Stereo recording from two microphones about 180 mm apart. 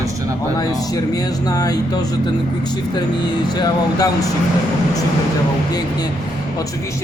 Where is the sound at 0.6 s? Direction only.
20° left (ahead or behind).